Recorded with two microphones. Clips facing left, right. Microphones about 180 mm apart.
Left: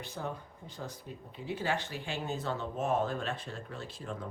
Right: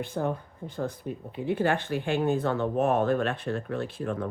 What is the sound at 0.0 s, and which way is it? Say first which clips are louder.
A woman's voice: right 10 dB; 55° right (ahead or behind).